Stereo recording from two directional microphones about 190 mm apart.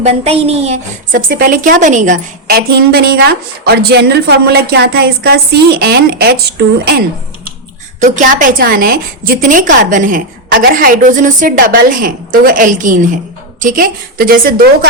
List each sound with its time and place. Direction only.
0.0 s a woman's voice: 35° right (ahead or behind); by 7.0 s 55° right (ahead or behind)
8.0 s a woman's voice: 40° right (ahead or behind)